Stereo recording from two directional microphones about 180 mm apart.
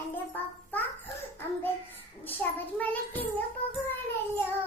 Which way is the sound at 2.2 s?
10° left (ahead or behind).